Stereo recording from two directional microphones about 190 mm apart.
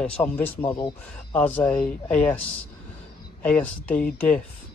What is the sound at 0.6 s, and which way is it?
Speech, 25° left (ahead or behind).